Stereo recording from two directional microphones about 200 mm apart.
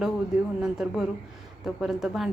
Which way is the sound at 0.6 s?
5° right (ahead or behind).